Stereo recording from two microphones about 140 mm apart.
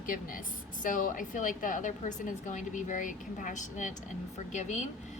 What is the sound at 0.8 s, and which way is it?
A woman's voice, 70° left (ahead or behind).